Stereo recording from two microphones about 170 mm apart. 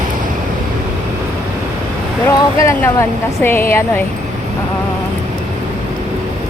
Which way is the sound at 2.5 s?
15° left (ahead or behind).